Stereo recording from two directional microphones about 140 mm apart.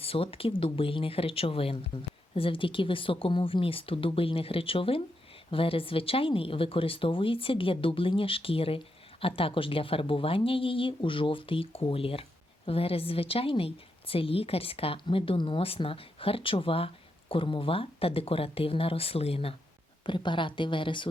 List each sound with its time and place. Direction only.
0.0 s a woman's voice: 45° left (ahead or behind)